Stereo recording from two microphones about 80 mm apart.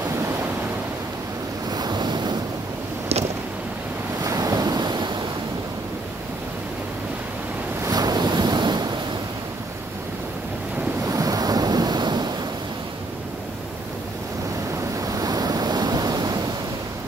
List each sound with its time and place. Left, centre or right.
1.7 s waves: right
4.2 s waves: right
7.9 s waves: right
11.1 s waves: right
15.0 s waves: right